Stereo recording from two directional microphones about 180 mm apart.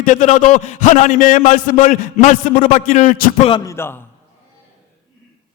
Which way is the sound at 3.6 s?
15° left (ahead or behind).